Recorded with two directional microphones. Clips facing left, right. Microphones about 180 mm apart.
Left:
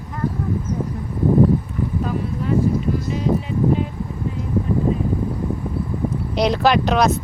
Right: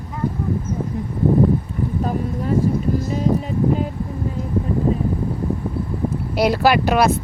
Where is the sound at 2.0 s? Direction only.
40° right (ahead or behind).